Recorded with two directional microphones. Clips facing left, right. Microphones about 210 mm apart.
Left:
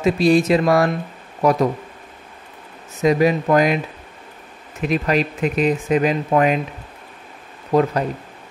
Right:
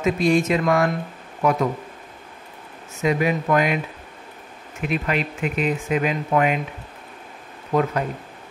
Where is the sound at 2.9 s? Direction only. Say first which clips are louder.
Left 5 dB; 35° left (ahead or behind).